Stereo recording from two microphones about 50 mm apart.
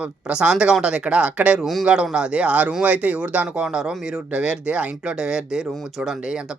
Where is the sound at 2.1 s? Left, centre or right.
Right.